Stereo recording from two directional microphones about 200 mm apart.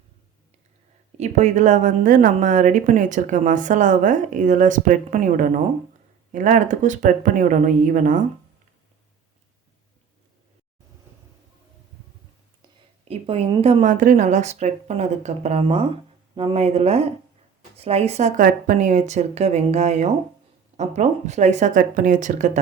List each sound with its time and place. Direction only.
1.2 s a woman's voice: 35° right (ahead or behind)
13.1 s a woman's voice: 30° right (ahead or behind)